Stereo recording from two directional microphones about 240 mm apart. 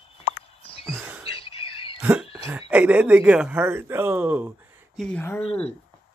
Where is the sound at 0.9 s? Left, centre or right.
Centre.